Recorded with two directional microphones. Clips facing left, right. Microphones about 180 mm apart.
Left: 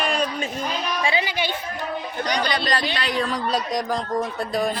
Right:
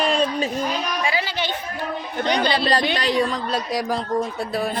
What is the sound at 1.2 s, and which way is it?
Chatter, 10° left (ahead or behind).